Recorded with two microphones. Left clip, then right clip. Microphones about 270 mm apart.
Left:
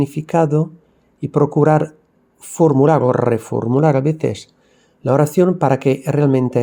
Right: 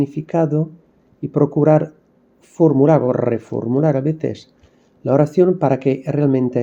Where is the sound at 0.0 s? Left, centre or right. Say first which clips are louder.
Left 2 dB; left.